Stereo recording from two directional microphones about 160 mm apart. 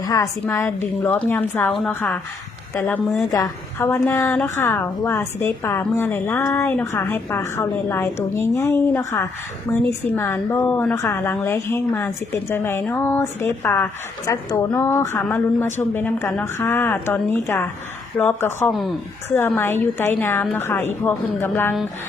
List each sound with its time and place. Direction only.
0.0 s a woman's voice: 25° left (ahead or behind); by 3.2 s 5° left (ahead or behind)
3.3 s a woman's voice: 20° left (ahead or behind)